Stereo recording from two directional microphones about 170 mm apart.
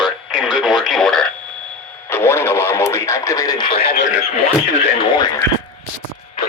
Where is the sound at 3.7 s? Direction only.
70° left (ahead or behind).